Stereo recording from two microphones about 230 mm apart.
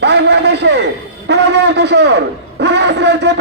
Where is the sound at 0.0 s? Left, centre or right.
Right.